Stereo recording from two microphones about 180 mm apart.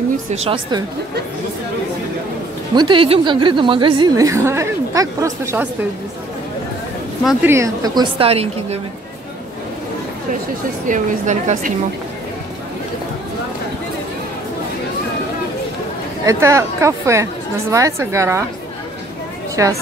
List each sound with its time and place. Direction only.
0.3 s speech: 35° right (ahead or behind)
2.7 s a woman's voice: 25° right (ahead or behind)
7.4 s a woman's voice: 15° right (ahead or behind); by 8.7 s 35° right (ahead or behind)
10.9 s a woman's voice: 45° right (ahead or behind)
16.3 s a woman's voice: 15° right (ahead or behind)
19.5 s speech: 20° right (ahead or behind)